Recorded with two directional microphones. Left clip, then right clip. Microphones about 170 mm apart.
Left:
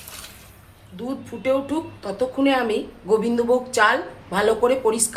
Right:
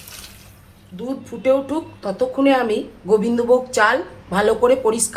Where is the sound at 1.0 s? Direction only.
5° right (ahead or behind).